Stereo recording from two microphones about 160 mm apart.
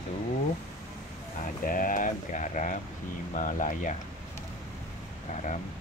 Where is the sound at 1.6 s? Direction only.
60° left (ahead or behind).